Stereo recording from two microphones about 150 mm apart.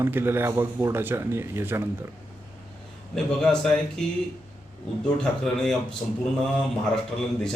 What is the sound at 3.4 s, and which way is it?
Speech, 5° left (ahead or behind).